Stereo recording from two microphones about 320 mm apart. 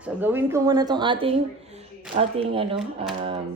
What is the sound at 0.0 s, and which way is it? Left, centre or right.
A woman's voice, centre.